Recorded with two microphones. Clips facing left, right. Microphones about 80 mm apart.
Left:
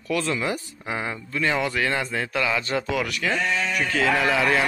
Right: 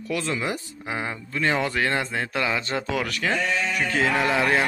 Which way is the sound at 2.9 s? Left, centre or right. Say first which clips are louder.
Even; right.